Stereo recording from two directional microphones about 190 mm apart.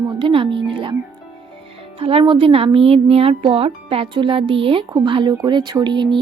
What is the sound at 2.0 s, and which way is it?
Speech, 30° right (ahead or behind).